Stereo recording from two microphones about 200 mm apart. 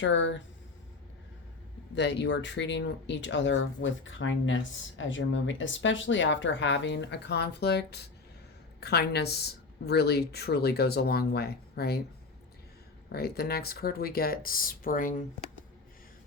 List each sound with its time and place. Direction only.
0.0 s speech: 70° left (ahead or behind)
2.0 s speech: 60° left (ahead or behind)
13.1 s speech: 50° left (ahead or behind)